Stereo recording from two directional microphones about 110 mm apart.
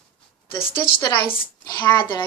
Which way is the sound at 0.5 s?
50° left (ahead or behind).